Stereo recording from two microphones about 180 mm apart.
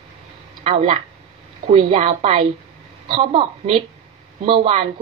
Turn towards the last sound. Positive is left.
turn(degrees=-30)  # may be behind; listen again after turning